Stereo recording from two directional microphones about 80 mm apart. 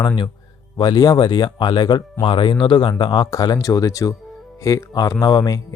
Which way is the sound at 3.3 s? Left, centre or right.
Left.